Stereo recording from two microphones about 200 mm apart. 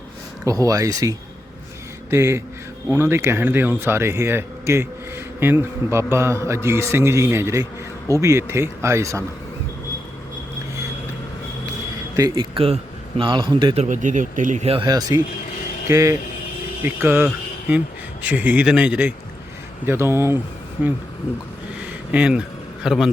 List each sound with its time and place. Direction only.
0.4 s speech: 15° right (ahead or behind)
12.1 s speech: 20° right (ahead or behind)
13.8 s speech: 40° right (ahead or behind); by 20.9 s 10° right (ahead or behind)
21.8 s a sound: 5° right (ahead or behind)